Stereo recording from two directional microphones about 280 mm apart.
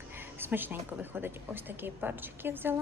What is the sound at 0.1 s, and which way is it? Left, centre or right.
Speech, centre.